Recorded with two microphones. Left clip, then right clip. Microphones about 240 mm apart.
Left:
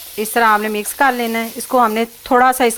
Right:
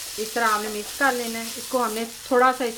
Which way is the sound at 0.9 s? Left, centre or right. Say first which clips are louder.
Left 7 dB; left.